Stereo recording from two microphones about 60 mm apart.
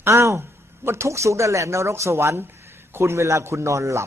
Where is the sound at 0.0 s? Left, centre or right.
Right.